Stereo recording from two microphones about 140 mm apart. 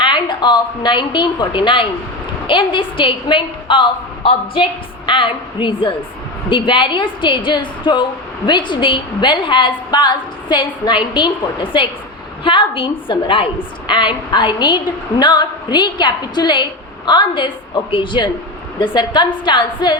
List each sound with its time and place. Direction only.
0.0 s a woman's voice: 35° left (ahead or behind)